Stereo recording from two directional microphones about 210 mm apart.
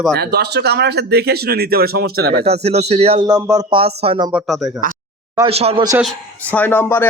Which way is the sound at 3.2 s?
15° right (ahead or behind).